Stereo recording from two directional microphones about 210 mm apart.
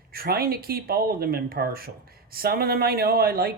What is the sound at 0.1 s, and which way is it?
Speech, 45° right (ahead or behind).